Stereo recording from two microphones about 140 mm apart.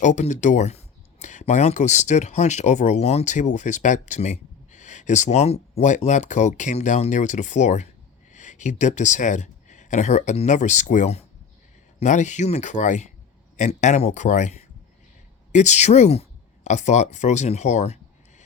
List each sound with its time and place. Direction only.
0.0 s speech: 60° left (ahead or behind)